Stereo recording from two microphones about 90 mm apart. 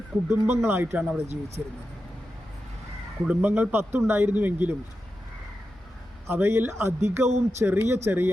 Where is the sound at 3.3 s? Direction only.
20° right (ahead or behind).